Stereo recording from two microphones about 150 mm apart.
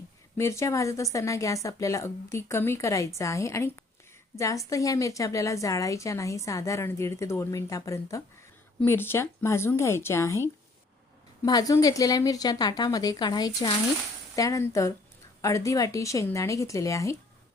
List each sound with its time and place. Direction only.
0.3 s a woman's voice: 20° left (ahead or behind)
11.4 s a woman's voice: 25° left (ahead or behind)